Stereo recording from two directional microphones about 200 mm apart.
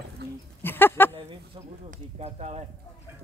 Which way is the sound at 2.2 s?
30° right (ahead or behind).